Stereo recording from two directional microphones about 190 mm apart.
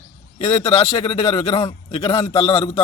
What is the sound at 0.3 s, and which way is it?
A man's voice, 30° left (ahead or behind).